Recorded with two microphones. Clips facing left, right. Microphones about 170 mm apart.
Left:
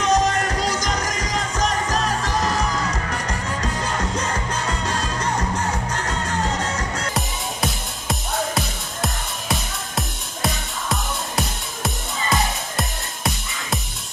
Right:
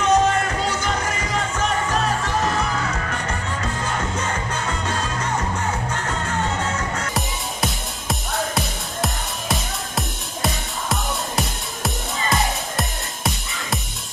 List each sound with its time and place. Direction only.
0.0 s music: 40° left (ahead or behind)
7.2 s music: centre (ahead or behind)